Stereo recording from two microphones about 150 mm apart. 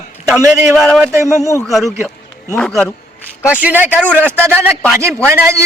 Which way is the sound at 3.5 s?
10° right (ahead or behind).